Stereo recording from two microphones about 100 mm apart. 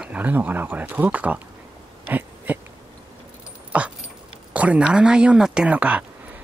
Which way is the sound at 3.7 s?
15° right (ahead or behind).